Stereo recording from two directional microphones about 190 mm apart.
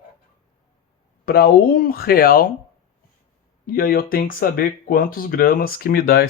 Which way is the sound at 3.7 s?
50° left (ahead or behind).